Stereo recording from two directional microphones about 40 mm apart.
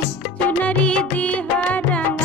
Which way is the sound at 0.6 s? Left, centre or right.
Left.